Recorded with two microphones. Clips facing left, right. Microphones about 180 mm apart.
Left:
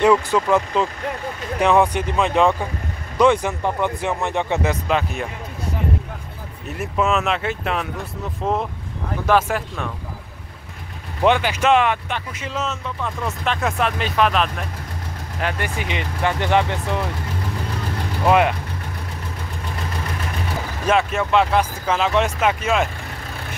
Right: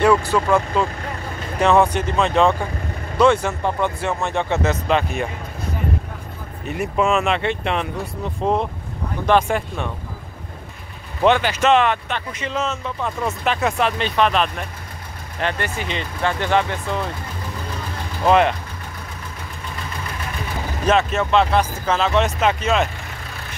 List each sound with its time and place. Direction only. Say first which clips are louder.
0.0 s speech: even; 20° left (ahead or behind)
4.8 s speech: right 2 dB; 5° left (ahead or behind)
6.7 s speech: right 2 dB; centre (ahead or behind)
11.2 s speech: right 1 dB; 10° left (ahead or behind)
15.4 s speech: right 1 dB; 15° left (ahead or behind)
18.2 s speech: right 1 dB; 10° left (ahead or behind)
20.8 s speech: right 1 dB; 10° left (ahead or behind)